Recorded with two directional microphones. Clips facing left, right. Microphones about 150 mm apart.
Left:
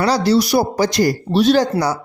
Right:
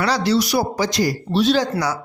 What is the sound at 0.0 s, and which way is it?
Speech, 35° left (ahead or behind).